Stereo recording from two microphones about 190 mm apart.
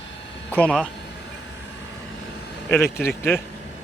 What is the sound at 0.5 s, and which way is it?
Speech, 5° left (ahead or behind).